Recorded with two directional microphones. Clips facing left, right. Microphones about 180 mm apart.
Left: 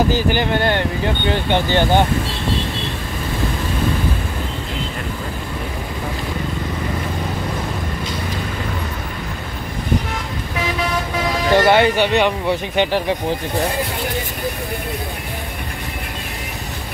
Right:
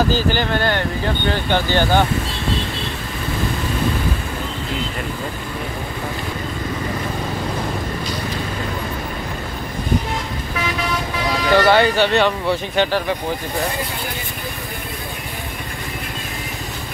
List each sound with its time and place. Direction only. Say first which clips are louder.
0.1 s speech: left 1 dB; 20° left (ahead or behind)
11.5 s speech: left 1 dB; 20° left (ahead or behind)